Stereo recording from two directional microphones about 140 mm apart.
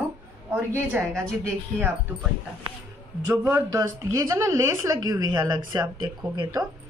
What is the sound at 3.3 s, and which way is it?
Speech, 20° right (ahead or behind).